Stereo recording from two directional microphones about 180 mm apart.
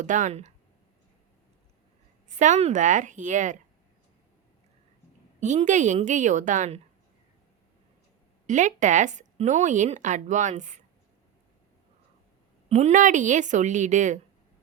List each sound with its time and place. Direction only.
0.0 s speech: 45° right (ahead or behind)
2.3 s speech: 40° right (ahead or behind)
5.4 s speech: 40° right (ahead or behind)
8.4 s speech: 45° right (ahead or behind)
12.6 s speech: 40° right (ahead or behind)